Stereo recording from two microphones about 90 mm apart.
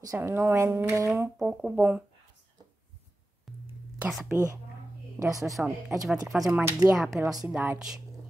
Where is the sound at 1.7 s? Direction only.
20° right (ahead or behind).